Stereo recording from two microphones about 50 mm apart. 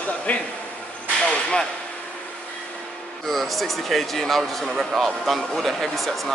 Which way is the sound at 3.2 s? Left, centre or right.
Centre.